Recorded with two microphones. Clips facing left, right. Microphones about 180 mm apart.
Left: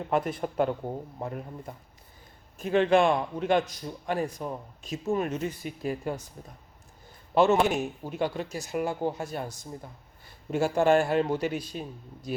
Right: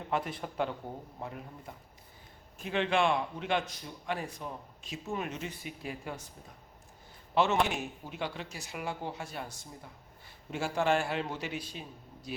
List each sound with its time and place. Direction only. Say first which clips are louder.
0.1 s a man's voice: left 6 dB; 45° left (ahead or behind)
7.3 s a man's voice: left 6 dB; 45° left (ahead or behind)